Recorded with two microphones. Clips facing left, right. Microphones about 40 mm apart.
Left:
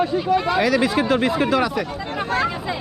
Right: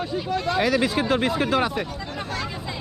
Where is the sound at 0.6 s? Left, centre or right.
Left.